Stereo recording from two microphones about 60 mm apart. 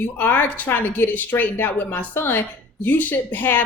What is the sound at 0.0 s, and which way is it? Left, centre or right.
A woman's voice, left.